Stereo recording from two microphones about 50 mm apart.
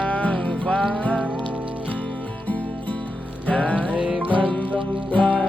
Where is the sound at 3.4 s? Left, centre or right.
Left.